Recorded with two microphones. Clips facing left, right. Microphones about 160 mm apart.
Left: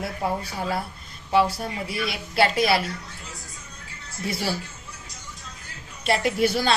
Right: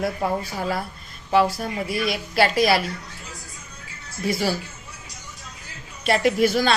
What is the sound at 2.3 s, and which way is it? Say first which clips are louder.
Speech: right 1 dB; 25° left (ahead or behind).